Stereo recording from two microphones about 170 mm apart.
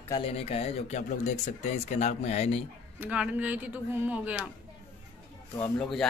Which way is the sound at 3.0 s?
10° right (ahead or behind).